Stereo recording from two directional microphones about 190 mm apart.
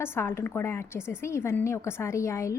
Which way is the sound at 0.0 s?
10° left (ahead or behind).